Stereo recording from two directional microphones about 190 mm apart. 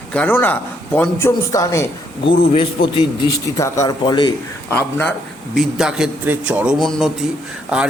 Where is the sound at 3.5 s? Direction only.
15° left (ahead or behind).